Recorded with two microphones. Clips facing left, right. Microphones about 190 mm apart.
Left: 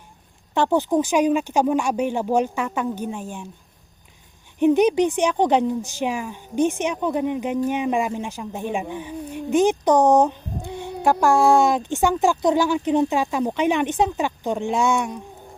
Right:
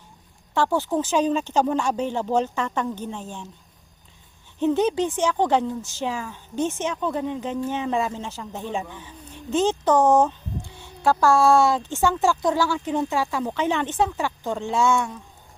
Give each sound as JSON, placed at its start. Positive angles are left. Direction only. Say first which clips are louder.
{"t": 0.5, "sound": "a woman's voice", "louder": "left 3 dB", "side_deg": 20}
{"t": 4.6, "sound": "a woman's voice", "louder": "left 4 dB", "side_deg": 15}
{"t": 10.7, "sound": "child singing", "louder": "left 14 dB", "side_deg": 15}
{"t": 11.0, "sound": "a woman's voice", "louder": "left 1 dB", "side_deg": 15}